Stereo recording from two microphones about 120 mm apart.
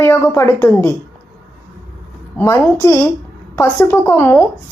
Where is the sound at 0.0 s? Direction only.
20° left (ahead or behind).